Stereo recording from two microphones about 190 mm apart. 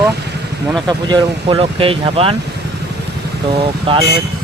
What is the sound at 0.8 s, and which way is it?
Speech, 25° right (ahead or behind).